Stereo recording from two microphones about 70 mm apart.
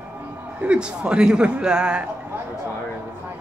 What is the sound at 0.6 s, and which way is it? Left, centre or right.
A man's voice, centre.